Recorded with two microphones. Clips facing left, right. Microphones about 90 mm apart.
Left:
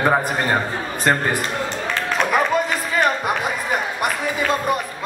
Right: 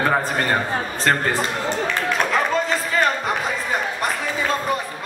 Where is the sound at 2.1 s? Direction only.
15° left (ahead or behind).